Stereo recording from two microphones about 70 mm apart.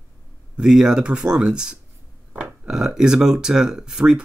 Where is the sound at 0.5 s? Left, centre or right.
Centre.